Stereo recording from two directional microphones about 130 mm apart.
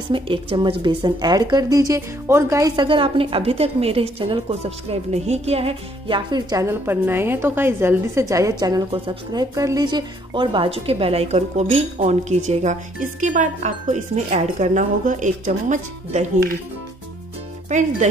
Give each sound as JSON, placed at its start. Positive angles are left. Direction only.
{"t": 0.1, "sound": "a woman's voice", "side_deg": -40}
{"t": 2.7, "sound": "a woman's voice", "side_deg": -40}
{"t": 4.5, "sound": "a woman's voice", "side_deg": -55}
{"t": 6.5, "sound": "a woman's voice", "side_deg": -20}
{"t": 17.6, "sound": "speech", "side_deg": -70}